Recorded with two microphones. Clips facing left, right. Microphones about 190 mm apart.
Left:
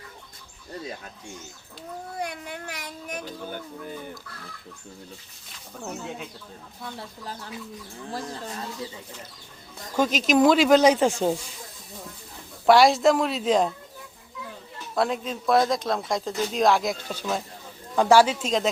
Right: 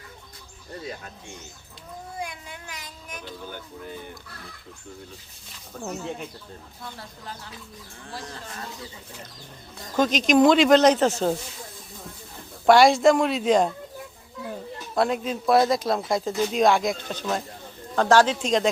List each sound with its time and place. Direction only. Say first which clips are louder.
2.2 s speech: left 4 dB; 60° left (ahead or behind)
9.9 s speech: right 2 dB; 10° left (ahead or behind)
12.6 s speech: right 1 dB; centre (ahead or behind)
14.9 s speech: right 2 dB; centre (ahead or behind)